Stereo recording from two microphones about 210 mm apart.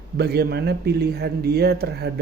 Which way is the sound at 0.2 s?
50° right (ahead or behind).